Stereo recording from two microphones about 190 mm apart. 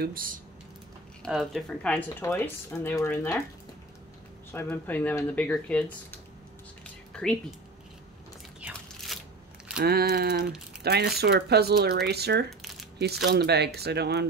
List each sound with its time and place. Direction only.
0.0 s speech: 50° right (ahead or behind)
1.2 s speech: centre (ahead or behind)
4.5 s speech: 10° left (ahead or behind)
6.8 s a sound: 5° left (ahead or behind)
8.5 s a sound: 5° right (ahead or behind)
9.8 s speech: 55° right (ahead or behind)